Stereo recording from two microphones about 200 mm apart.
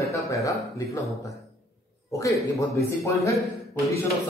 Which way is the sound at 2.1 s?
15° left (ahead or behind).